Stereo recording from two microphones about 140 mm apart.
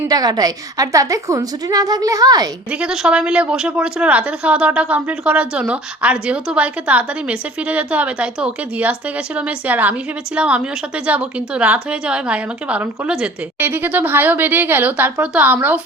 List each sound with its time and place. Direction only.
0.1 s a woman's voice: 30° right (ahead or behind)
2.7 s a woman's voice: 5° right (ahead or behind)